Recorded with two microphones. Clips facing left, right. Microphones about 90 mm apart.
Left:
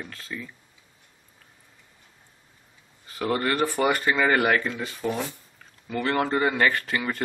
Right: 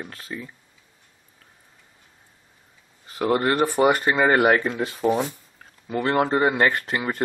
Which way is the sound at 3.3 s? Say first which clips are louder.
Right 4 dB; 25° right (ahead or behind).